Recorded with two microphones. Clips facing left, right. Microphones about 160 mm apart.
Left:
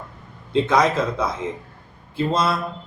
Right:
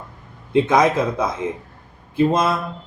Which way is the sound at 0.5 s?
15° right (ahead or behind).